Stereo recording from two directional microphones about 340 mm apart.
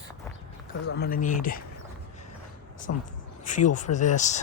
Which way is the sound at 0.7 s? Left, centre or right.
Left.